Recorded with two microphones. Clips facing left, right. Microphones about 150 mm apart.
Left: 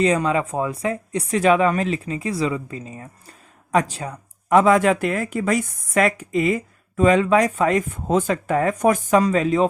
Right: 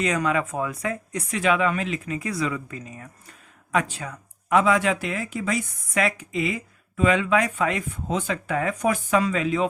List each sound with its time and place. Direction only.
0.0 s speech: 30° left (ahead or behind)